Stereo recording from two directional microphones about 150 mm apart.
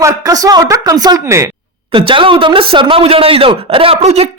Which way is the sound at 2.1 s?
35° right (ahead or behind).